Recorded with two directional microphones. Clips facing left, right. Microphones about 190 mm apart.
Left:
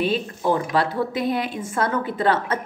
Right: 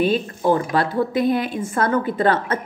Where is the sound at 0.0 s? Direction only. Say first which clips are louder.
Right 3 dB; 50° right (ahead or behind).